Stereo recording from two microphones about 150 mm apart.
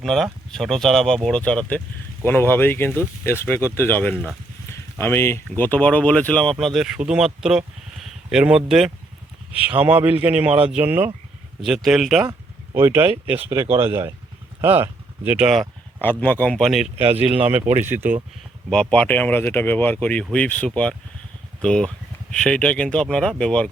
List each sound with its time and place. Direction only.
0.0 s a man's voice: centre (ahead or behind)
12.3 s a sound: 15° right (ahead or behind)
13.3 s a man's voice: 15° right (ahead or behind)
16.0 s a man's voice: 10° left (ahead or behind); by 18.2 s 15° right (ahead or behind)
18.7 s speech: 5° left (ahead or behind)